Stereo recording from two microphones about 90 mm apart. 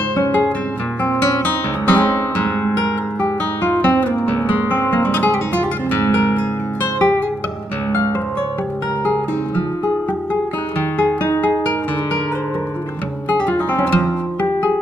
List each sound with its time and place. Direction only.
1.0 s music: 20° left (ahead or behind)
3.8 s guitar: 20° left (ahead or behind)
11.1 s music: 20° left (ahead or behind)
13.4 s music: 20° left (ahead or behind)